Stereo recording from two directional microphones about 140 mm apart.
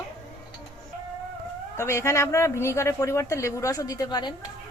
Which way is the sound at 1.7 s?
20° left (ahead or behind).